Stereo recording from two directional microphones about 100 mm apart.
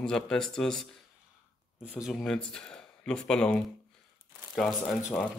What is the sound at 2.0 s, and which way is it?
Speech, 5° left (ahead or behind).